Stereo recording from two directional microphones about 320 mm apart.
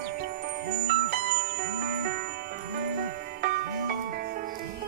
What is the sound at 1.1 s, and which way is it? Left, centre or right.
Music, right.